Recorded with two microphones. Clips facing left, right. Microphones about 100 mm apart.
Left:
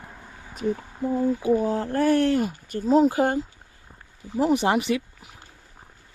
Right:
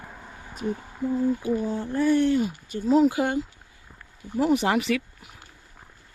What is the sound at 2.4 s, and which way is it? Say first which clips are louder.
Speech: left 1 dB; 50° left (ahead or behind).